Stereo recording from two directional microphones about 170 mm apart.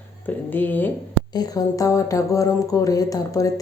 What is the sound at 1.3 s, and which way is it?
Speech, 20° left (ahead or behind).